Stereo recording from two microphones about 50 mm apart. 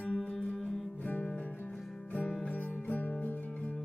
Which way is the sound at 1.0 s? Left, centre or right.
Left.